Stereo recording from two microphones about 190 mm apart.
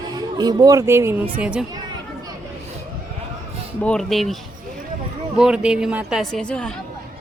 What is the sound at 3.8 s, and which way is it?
Speech, 5° left (ahead or behind).